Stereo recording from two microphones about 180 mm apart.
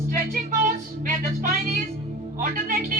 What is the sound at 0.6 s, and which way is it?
Music, 50° right (ahead or behind).